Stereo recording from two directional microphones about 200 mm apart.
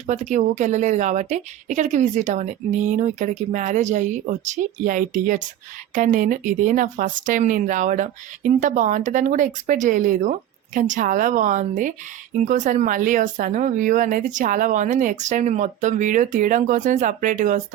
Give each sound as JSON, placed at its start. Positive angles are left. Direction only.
{"t": 0.1, "sound": "speech", "side_deg": -35}